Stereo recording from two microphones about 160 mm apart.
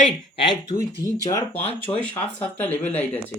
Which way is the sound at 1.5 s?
40° left (ahead or behind).